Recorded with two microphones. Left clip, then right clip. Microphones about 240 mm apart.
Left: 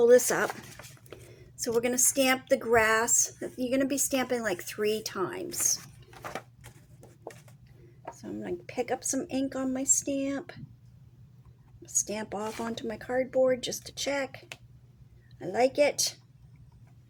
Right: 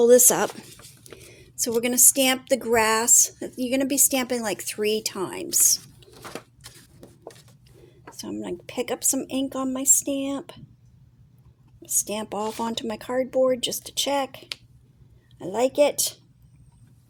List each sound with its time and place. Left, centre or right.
0.0 s speech: right
1.5 s a woman's voice: right
8.2 s speech: right
11.9 s speech: right